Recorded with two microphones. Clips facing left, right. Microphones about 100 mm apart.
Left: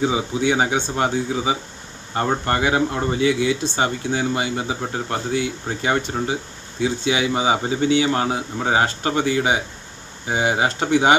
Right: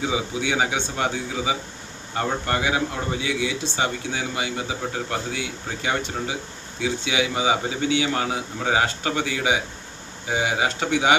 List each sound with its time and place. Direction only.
0.0 s speech: 35° left (ahead or behind)